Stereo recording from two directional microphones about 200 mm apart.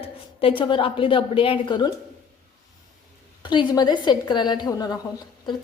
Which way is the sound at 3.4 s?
25° left (ahead or behind).